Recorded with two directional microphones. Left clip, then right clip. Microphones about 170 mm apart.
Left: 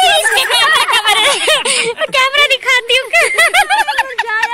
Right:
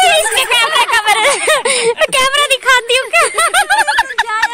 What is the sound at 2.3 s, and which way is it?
Speech, 35° right (ahead or behind).